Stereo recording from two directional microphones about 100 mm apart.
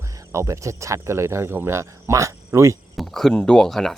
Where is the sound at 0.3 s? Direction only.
30° right (ahead or behind).